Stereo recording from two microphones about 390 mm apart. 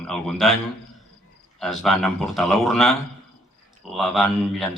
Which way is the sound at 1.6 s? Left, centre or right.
Centre.